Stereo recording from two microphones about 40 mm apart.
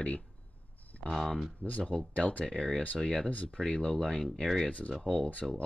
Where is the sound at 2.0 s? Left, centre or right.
Left.